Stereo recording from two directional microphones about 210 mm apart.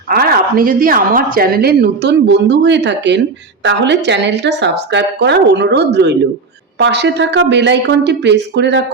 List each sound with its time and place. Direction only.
0.1 s a woman's voice: 45° right (ahead or behind)